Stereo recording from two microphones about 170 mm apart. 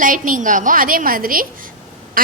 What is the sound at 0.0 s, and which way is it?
A woman's voice, 50° right (ahead or behind).